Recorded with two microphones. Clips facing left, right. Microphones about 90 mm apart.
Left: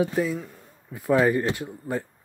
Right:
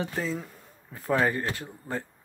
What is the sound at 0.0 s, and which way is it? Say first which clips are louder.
Speech: left 6 dB; 10° left (ahead or behind).